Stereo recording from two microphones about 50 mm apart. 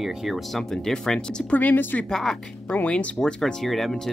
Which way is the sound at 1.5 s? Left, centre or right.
Left.